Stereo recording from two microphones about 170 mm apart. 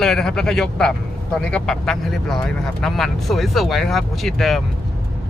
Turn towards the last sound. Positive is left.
turn(degrees=0)  # may be behind; listen again after turning